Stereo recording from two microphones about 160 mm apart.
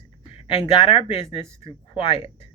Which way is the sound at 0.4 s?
40° left (ahead or behind).